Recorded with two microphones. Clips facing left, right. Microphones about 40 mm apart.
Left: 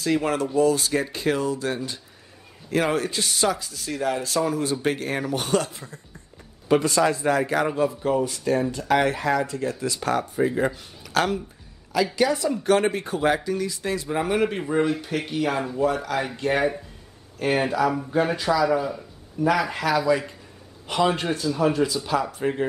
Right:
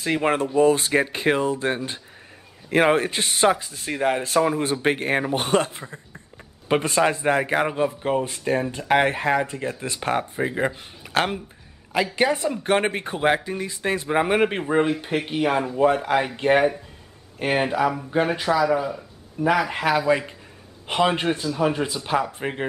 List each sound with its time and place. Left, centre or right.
0.0 s speech: right
18.6 s speech: centre
19.7 s speech: right